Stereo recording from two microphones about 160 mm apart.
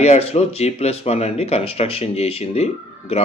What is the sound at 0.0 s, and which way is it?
Speech, 40° left (ahead or behind).